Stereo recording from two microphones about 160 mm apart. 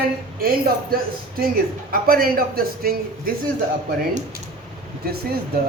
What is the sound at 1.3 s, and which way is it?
Speech, 65° right (ahead or behind).